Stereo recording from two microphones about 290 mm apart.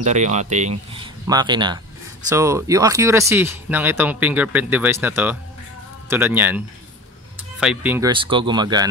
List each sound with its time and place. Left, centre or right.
0.0 s speech: right; by 6.6 s centre
7.6 s speech: centre